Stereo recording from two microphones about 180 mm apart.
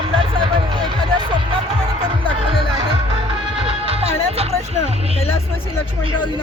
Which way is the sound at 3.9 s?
35° right (ahead or behind).